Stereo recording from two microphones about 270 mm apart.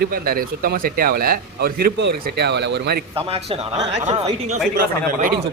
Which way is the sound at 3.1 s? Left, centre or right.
Right.